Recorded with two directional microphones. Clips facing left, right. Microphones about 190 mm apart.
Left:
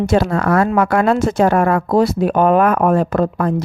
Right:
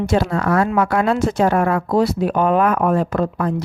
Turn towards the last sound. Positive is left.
turn(degrees=50)  # may be behind; listen again after turning